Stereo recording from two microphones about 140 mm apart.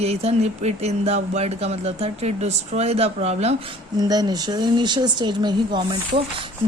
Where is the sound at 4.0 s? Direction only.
30° right (ahead or behind).